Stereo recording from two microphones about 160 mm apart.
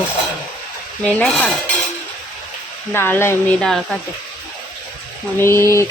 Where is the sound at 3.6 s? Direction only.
Centre (ahead or behind).